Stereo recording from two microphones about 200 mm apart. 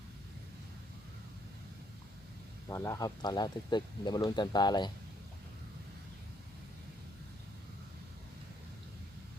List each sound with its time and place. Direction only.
2.6 s speech: 15° left (ahead or behind)